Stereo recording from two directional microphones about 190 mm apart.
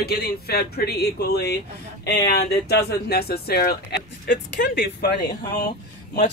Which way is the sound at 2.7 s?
55° left (ahead or behind).